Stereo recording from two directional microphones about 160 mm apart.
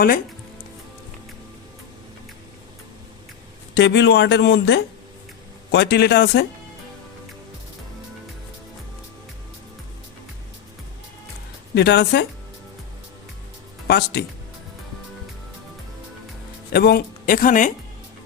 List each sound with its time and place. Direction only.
3.8 s speech: 90° left
11.7 s speech: 90° left
13.8 s speech: 90° left
16.7 s speech: 85° left; by 17.7 s 60° left (ahead or behind)